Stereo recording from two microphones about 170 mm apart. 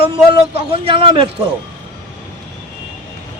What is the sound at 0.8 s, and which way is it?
Speech, 30° right (ahead or behind).